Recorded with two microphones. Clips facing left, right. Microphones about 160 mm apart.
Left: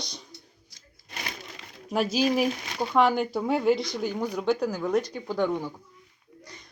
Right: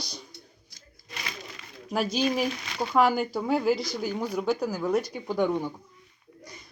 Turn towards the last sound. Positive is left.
turn(degrees=-10)  # may be behind; listen again after turning